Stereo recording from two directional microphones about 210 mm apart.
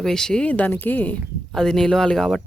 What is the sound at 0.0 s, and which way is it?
Speech, 5° left (ahead or behind).